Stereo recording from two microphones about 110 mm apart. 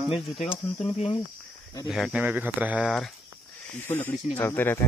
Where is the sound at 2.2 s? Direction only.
15° right (ahead or behind).